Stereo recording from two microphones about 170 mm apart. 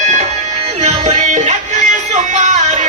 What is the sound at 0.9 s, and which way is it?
Music, 40° right (ahead or behind).